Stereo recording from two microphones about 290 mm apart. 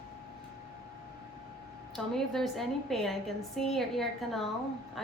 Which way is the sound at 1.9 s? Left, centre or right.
Centre.